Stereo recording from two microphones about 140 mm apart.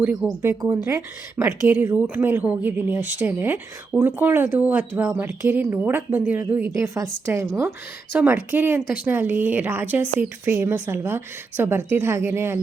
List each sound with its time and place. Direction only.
0.0 s speech: 10° right (ahead or behind)
0.6 s a woman's voice: 20° right (ahead or behind)